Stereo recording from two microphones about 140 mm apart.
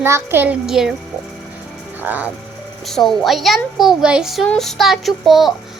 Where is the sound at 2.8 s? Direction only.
Centre (ahead or behind).